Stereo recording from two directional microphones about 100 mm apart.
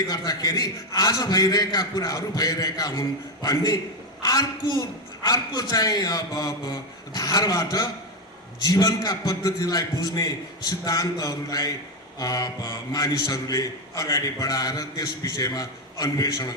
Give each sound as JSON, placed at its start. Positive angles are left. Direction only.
{"t": 0.0, "sound": "a man's voice", "side_deg": 45}